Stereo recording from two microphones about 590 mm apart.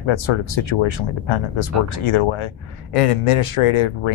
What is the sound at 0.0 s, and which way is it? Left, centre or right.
Speech, left.